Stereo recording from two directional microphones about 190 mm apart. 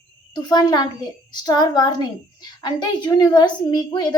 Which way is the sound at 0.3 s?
20° left (ahead or behind).